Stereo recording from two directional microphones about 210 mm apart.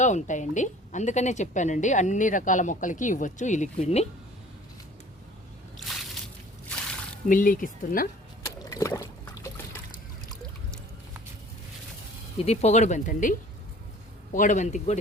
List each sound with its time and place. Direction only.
0.0 s a woman's voice: 35° left (ahead or behind)
5.7 s a sound: centre (ahead or behind)
7.3 s a woman's voice: 40° left (ahead or behind)
8.4 s trickle: 15° left (ahead or behind)
12.4 s a woman's voice: 30° left (ahead or behind)
14.3 s a woman's voice: 35° left (ahead or behind)